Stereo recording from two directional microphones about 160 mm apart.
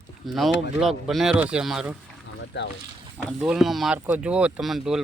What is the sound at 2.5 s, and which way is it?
Speech, 90° left.